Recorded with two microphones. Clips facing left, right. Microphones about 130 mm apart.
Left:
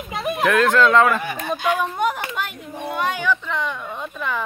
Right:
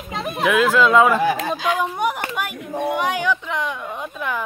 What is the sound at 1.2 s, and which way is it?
Speech, 90° right.